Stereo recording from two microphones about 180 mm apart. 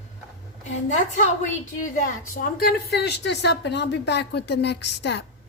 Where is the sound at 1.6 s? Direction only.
45° left (ahead or behind); by 5.2 s 70° left (ahead or behind).